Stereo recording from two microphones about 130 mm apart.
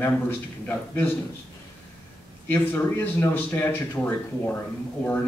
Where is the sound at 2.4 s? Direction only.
15° left (ahead or behind).